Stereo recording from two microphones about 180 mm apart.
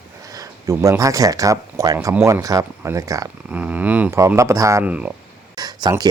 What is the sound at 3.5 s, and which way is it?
Speech, 10° right (ahead or behind).